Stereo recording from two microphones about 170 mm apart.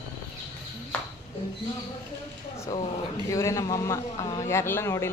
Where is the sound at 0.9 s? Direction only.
5° left (ahead or behind).